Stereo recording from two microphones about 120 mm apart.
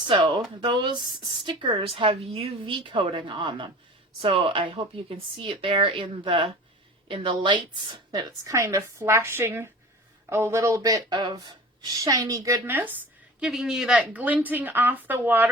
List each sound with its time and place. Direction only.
0.1 s a sound: 40° right (ahead or behind)
0.6 s speech: 40° right (ahead or behind)
1.7 s a woman's voice: 50° right (ahead or behind); by 12.6 s 30° right (ahead or behind)
12.6 s a woman's voice: 15° right (ahead or behind)
13.4 s a woman's voice: 5° right (ahead or behind)